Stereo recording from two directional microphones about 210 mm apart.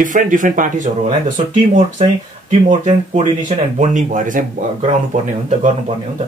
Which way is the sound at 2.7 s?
30° right (ahead or behind).